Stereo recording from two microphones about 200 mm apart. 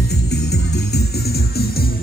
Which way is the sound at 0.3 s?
55° left (ahead or behind).